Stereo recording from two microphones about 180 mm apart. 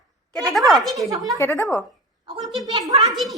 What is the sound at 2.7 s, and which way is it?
Speech, 20° right (ahead or behind).